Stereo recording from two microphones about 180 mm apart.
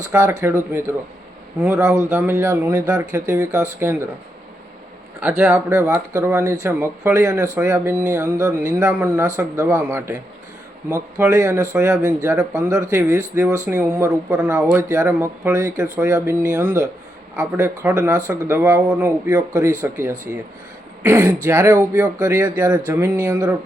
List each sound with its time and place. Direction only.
0.2 s speech: 15° right (ahead or behind)
5.2 s speech: 10° right (ahead or behind)